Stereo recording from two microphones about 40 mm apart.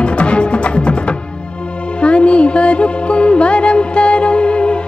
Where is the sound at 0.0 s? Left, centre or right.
Left.